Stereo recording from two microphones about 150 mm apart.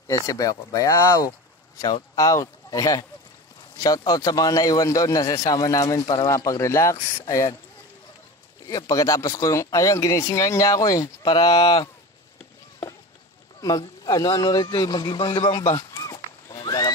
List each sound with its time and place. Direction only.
0.1 s a man's voice: 25° left (ahead or behind)
8.6 s a man's voice: 25° left (ahead or behind); by 11.8 s 40° left (ahead or behind)
13.6 s a man's voice: 25° left (ahead or behind)
15.8 s a sound: 20° left (ahead or behind)